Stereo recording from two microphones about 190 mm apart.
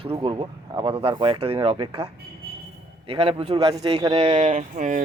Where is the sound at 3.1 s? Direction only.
30° right (ahead or behind).